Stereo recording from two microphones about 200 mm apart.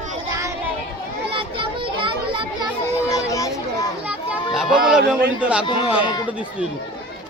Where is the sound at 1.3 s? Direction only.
25° right (ahead or behind).